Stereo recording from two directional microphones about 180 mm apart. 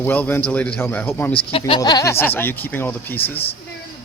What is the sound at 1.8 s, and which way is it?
A man's voice, 20° left (ahead or behind).